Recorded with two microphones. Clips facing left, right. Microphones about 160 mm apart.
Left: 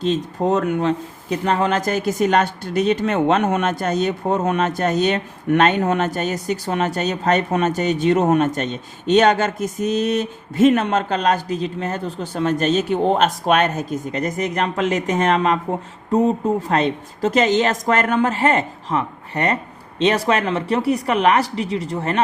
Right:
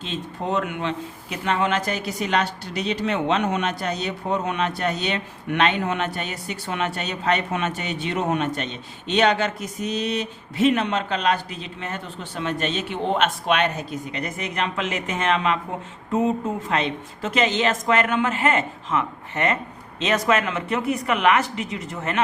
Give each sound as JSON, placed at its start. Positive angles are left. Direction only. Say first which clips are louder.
{"t": 0.0, "sound": "a woman's voice", "louder": "left 9 dB", "side_deg": 40}